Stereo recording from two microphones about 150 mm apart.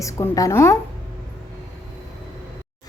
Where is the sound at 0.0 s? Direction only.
20° left (ahead or behind).